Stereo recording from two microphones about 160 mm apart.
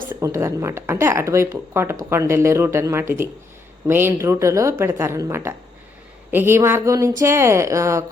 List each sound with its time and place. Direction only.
0.1 s speech: 20° right (ahead or behind)